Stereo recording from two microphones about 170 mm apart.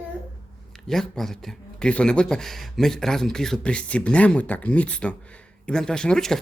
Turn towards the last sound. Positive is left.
turn(degrees=5)  # may be behind; listen again after turning